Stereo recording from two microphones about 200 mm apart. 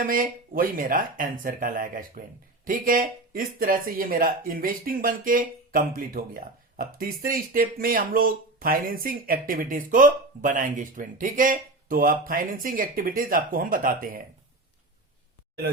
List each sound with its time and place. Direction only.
0.0 s speech: 45° right (ahead or behind)